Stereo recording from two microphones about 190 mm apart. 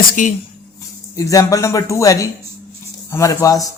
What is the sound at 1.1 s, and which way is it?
Speech, 20° left (ahead or behind).